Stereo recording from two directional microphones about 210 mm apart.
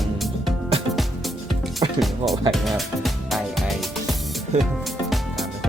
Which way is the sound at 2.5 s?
Centre (ahead or behind).